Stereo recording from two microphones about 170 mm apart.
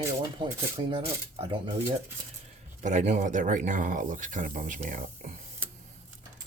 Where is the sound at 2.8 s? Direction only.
45° right (ahead or behind).